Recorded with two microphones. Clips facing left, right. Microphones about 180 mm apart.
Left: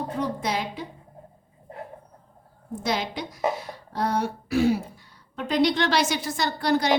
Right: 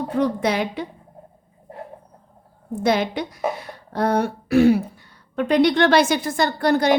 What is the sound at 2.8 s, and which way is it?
A woman's voice, 60° right (ahead or behind).